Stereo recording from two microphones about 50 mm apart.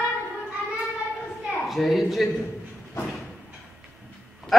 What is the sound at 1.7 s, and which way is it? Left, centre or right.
Speech, centre.